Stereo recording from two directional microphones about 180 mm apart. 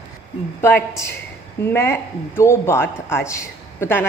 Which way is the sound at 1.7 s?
15° left (ahead or behind).